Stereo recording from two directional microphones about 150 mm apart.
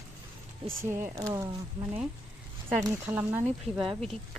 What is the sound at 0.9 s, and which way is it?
Speech, 15° right (ahead or behind).